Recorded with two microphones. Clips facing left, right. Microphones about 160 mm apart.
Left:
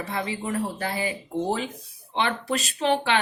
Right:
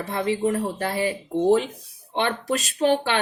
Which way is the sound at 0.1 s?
35° right (ahead or behind).